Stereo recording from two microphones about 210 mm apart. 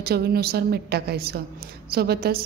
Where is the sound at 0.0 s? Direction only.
50° right (ahead or behind).